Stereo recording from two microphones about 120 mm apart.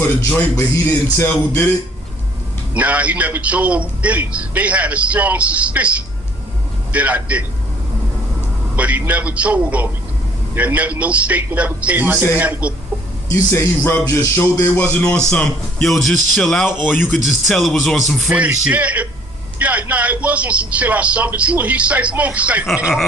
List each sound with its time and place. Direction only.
0.2 s a man's voice: 20° left (ahead or behind)
2.7 s a man's voice: 10° right (ahead or behind)
6.9 s a man's voice: 10° right (ahead or behind)
8.7 s a man's voice: 15° right (ahead or behind)
13.3 s a man's voice: 20° left (ahead or behind)
16.8 s a man's voice: 15° left (ahead or behind)
17.5 s speech: centre (ahead or behind)
18.3 s a man's voice: 10° right (ahead or behind)